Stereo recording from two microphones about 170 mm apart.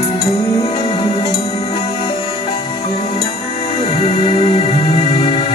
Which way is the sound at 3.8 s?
35° left (ahead or behind).